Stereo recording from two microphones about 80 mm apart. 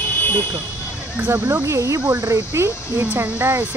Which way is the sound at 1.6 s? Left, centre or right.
Right.